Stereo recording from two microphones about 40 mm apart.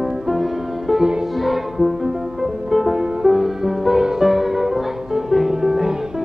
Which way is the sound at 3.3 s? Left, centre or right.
Centre.